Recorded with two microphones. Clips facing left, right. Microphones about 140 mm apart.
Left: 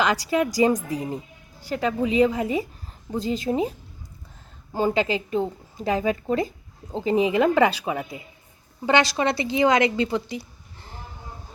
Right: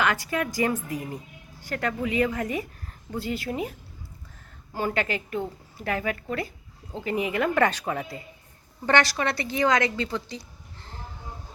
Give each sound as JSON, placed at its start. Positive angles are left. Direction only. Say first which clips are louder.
{"t": 0.0, "sound": "a woman's voice", "louder": "left 4 dB", "side_deg": 15}
{"t": 4.7, "sound": "a woman's voice", "louder": "left 5 dB", "side_deg": 20}
{"t": 7.6, "sound": "a woman's voice", "louder": "left 3 dB", "side_deg": 10}